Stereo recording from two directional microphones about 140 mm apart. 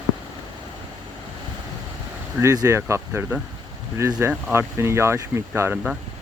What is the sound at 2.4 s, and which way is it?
Speech, 20° right (ahead or behind).